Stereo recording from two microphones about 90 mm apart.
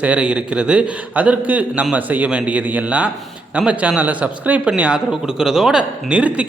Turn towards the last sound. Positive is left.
turn(degrees=-15)  # may be behind; listen again after turning